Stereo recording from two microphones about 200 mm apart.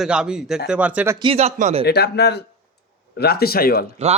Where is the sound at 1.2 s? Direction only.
30° right (ahead or behind).